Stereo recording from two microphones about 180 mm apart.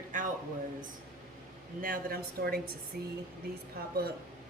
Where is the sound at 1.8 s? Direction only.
50° right (ahead or behind).